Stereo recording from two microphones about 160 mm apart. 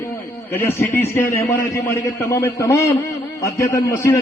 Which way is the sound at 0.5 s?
15° left (ahead or behind).